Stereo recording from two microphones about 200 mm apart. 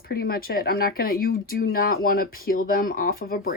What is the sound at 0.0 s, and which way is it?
Speech, 50° left (ahead or behind).